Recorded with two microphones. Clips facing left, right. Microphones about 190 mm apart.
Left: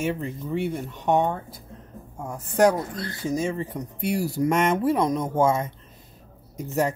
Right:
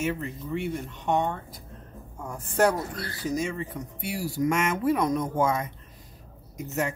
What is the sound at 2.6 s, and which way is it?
Speech, 20° left (ahead or behind).